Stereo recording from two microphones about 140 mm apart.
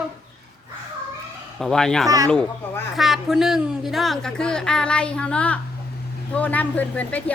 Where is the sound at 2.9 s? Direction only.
Centre (ahead or behind).